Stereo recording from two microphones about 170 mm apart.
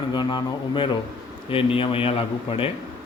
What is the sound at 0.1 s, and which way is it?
A man's voice, 25° left (ahead or behind).